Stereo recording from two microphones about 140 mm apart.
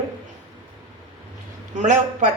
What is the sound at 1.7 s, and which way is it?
Speech, 65° right (ahead or behind).